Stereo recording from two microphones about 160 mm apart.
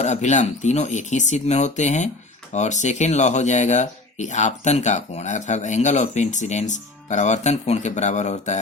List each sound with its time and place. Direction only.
0.0 s speech: 45° left (ahead or behind)